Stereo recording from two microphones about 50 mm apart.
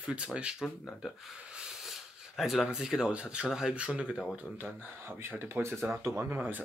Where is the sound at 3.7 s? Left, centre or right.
Right.